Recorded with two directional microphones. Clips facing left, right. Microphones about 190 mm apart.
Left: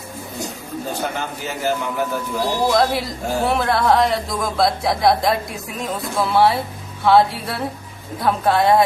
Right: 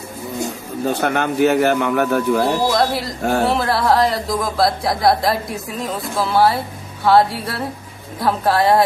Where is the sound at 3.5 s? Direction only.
5° right (ahead or behind).